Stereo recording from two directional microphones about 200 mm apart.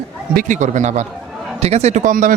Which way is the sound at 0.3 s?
40° right (ahead or behind).